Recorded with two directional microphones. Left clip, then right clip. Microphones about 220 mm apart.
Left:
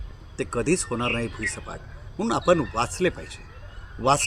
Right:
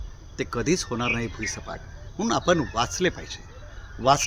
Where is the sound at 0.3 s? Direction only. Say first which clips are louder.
Left 1 dB; 5° right (ahead or behind).